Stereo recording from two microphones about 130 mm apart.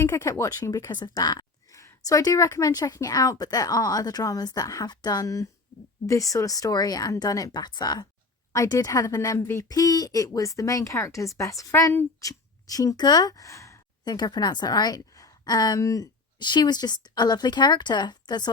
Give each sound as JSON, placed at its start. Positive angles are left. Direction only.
{"t": 0.0, "sound": "speech", "side_deg": 20}